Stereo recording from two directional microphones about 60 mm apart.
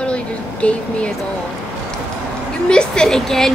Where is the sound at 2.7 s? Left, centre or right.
Centre.